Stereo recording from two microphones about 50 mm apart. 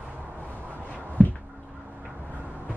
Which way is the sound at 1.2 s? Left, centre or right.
Left.